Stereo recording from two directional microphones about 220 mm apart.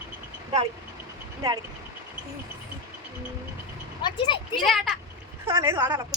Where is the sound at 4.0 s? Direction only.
20° left (ahead or behind).